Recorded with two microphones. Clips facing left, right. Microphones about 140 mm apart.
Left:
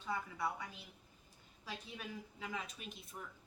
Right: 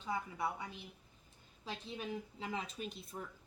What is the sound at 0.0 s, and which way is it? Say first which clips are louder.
Speech: right 1 dB; 20° right (ahead or behind).